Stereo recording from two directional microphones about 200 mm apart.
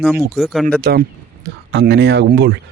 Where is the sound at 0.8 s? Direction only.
55° right (ahead or behind).